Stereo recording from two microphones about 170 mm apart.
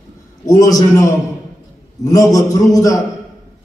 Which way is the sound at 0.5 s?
20° left (ahead or behind).